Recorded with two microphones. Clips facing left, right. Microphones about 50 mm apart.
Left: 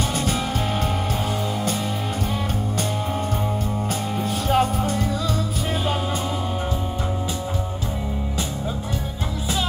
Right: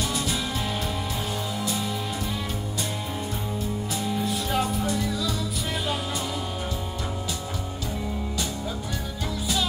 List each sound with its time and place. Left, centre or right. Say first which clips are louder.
0.1 s music: left 4 dB; left
4.1 s music: left 5 dB; left